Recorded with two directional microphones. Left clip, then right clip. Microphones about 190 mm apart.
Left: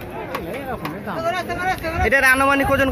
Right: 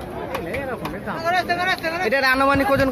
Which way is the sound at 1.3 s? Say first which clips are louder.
Right 2 dB; 55° left (ahead or behind).